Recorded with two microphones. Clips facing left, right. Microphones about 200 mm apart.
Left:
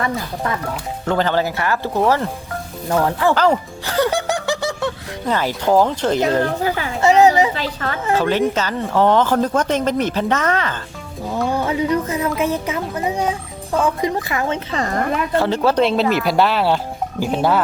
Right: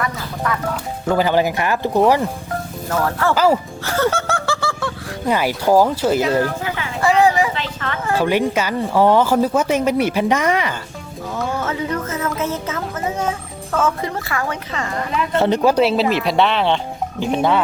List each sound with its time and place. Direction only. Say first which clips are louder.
0.4 s a woman's voice: right 1 dB; 25° left (ahead or behind)
1.0 s speech: right 2 dB; 10° right (ahead or behind)
2.9 s speech: left 2 dB; 15° left (ahead or behind)
3.3 s speech: right 4 dB; 5° right (ahead or behind)
3.8 s laughter: left 1 dB; 15° left (ahead or behind)
5.2 s speech: right 1 dB; 10° right (ahead or behind)
6.4 s speech: left 3 dB; 35° left (ahead or behind)
7.0 s a sound: left 2 dB; 20° left (ahead or behind)
7.5 s speech: left 2 dB; 40° left (ahead or behind)
8.2 s speech: right 2 dB; 10° right (ahead or behind)
11.5 s a woman's voice: left 6 dB; 15° left (ahead or behind)
14.8 s speech: left 4 dB; 40° left (ahead or behind)
15.3 s speech: right 4 dB; 20° right (ahead or behind); by 17.6 s 5° left (ahead or behind)